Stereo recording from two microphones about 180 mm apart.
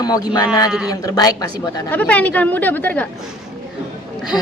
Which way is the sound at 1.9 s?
10° left (ahead or behind).